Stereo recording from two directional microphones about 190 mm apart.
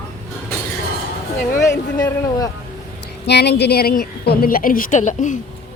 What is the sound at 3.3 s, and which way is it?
A woman's voice, 60° left (ahead or behind).